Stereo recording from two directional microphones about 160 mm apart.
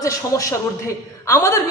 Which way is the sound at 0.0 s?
20° left (ahead or behind).